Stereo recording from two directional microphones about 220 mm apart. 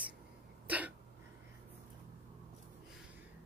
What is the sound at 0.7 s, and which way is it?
Throat clearing, 5° right (ahead or behind).